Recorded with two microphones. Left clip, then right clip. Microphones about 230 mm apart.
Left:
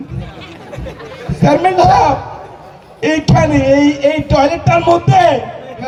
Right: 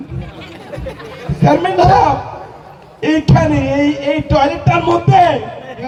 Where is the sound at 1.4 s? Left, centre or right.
Left.